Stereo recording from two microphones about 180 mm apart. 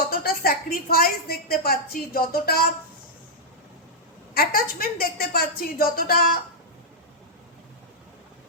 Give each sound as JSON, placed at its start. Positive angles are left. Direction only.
{"t": 0.1, "sound": "a woman's voice", "side_deg": 55}
{"t": 4.4, "sound": "a woman's voice", "side_deg": 55}